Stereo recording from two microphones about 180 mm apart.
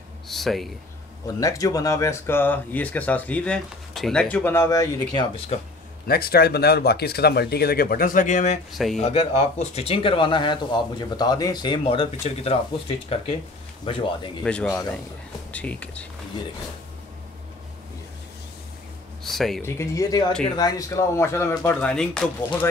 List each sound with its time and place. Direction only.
0.3 s speech: centre (ahead or behind)
1.2 s speech: 20° left (ahead or behind)
5.1 s speech: 30° left (ahead or behind)
6.0 s speech: 55° left (ahead or behind); by 8.5 s 40° left (ahead or behind)
8.7 s speech: centre (ahead or behind)
9.0 s speech: 35° left (ahead or behind)
14.4 s speech: 5° left (ahead or behind)
19.2 s speech: centre (ahead or behind)
19.6 s speech: 15° left (ahead or behind)